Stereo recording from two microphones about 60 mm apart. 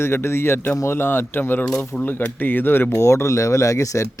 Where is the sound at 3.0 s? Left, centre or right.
Left.